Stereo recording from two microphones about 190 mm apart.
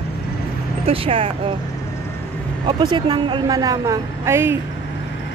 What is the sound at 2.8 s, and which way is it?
A woman's voice, 25° right (ahead or behind).